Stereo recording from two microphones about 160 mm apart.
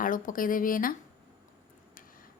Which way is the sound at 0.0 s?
55° left (ahead or behind).